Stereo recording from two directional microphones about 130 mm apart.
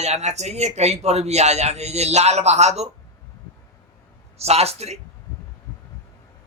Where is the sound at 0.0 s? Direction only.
60° right (ahead or behind).